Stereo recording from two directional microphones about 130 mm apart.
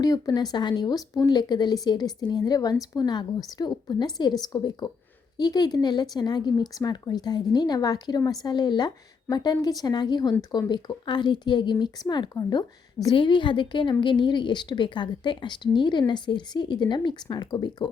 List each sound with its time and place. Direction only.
0.0 s a woman's voice: 30° left (ahead or behind)